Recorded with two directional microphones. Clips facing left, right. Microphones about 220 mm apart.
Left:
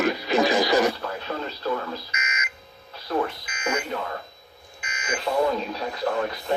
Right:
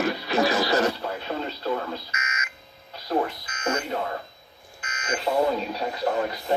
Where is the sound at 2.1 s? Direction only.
15° left (ahead or behind).